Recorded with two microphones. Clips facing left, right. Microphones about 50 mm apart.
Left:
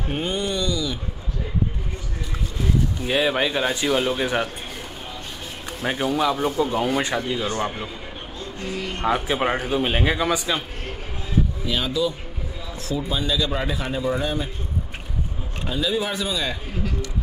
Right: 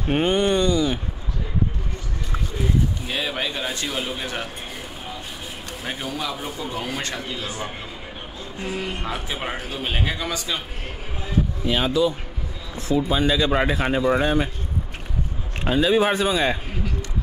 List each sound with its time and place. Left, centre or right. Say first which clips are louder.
0.1 s speech: right 6 dB; right
3.1 s a man's voice: left 5 dB; centre
5.9 s a man's voice: left 7 dB; centre
9.0 s a man's voice: left 7 dB; centre
11.6 s speech: right 6 dB; right
13.2 s speech: right 4 dB; right
15.6 s speech: right 6 dB; right